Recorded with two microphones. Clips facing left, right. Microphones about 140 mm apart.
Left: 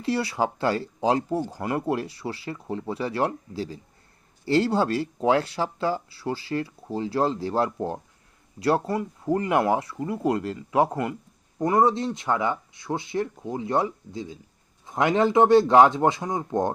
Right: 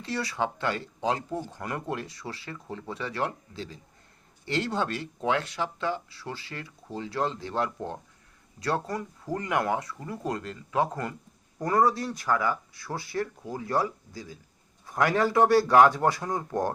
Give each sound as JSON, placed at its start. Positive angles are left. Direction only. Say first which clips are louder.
{"t": 0.0, "sound": "speech", "louder": "left 5 dB", "side_deg": 30}